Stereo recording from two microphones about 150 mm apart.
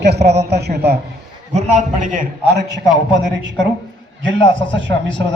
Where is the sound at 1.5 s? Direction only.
55° right (ahead or behind).